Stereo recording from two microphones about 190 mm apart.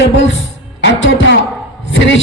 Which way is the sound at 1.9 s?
75° left (ahead or behind).